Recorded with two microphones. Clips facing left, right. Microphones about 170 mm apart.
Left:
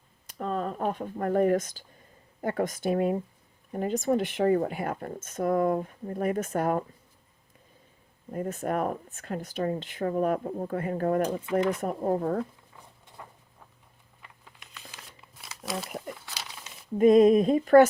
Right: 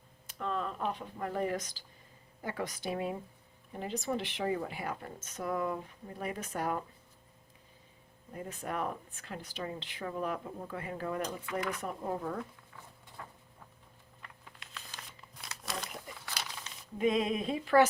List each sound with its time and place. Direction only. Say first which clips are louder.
0.3 s speech: left 5 dB; 40° left (ahead or behind)
8.3 s speech: left 9 dB; 50° left (ahead or behind)
11.3 s speech: left 9 dB; 25° left (ahead or behind)
11.8 s speech: left 9 dB; 45° left (ahead or behind)
14.2 s crumpling: left 1 dB; 5° left (ahead or behind)
17.0 s speech: left 12 dB; 45° left (ahead or behind)